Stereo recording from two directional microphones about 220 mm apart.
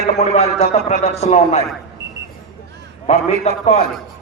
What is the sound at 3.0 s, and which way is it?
Speech, 30° left (ahead or behind).